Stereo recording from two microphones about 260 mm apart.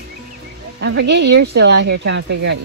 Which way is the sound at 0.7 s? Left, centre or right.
Right.